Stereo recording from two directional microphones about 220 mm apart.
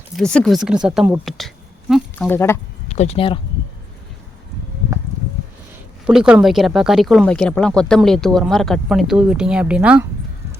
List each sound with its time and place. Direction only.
0.2 s speech: centre (ahead or behind)
2.9 s speech: 30° left (ahead or behind)
6.1 s speech: 5° right (ahead or behind)